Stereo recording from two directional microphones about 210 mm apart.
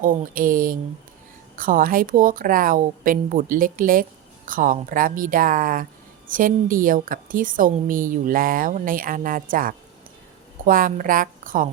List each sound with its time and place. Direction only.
0.0 s a woman's voice: 40° right (ahead or behind)